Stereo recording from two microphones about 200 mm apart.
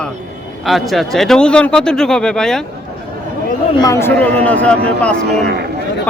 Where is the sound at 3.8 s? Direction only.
15° left (ahead or behind).